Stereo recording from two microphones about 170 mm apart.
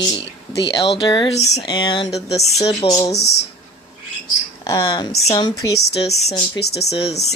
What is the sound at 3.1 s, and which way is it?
Speech, 75° left (ahead or behind).